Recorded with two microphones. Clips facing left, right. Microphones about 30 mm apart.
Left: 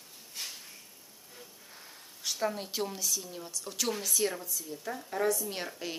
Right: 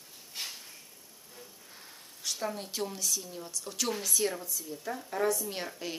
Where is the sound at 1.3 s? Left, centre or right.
Centre.